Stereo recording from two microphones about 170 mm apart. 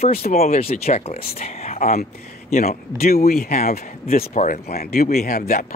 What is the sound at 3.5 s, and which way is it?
Speech, 40° left (ahead or behind).